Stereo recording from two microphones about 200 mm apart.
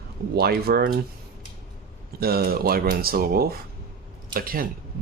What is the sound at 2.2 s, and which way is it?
Speech, 50° right (ahead or behind).